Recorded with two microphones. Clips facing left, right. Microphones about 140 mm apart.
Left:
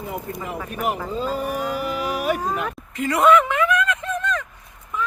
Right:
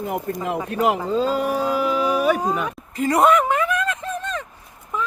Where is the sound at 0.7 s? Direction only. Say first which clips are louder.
Right 5 dB; 90° right.